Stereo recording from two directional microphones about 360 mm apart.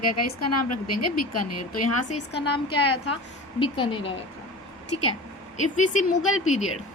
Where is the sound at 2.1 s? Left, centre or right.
Centre.